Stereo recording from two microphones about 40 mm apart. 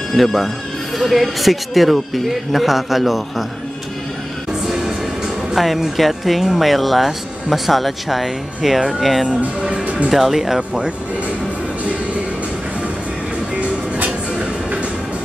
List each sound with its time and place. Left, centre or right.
0.1 s speech: centre
5.6 s speech: centre
9.6 s speech: right
9.8 s music: right
10.1 s speech: centre
13.6 s music: right